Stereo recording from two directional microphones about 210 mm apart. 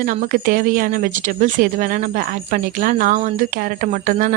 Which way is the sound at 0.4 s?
40° right (ahead or behind).